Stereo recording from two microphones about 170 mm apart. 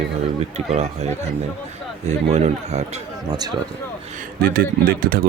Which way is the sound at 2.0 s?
40° right (ahead or behind).